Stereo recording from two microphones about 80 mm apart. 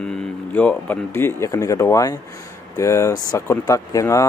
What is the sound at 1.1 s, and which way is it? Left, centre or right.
Speech, left.